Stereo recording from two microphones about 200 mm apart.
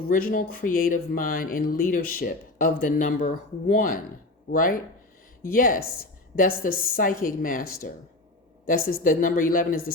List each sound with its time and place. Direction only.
0.1 s speech: 45° left (ahead or behind)